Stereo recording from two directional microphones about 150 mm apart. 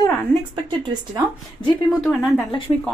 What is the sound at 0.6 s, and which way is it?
Speech, 30° right (ahead or behind).